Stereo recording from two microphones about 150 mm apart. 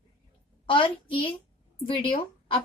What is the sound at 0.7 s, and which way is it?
A child's voice, 35° left (ahead or behind).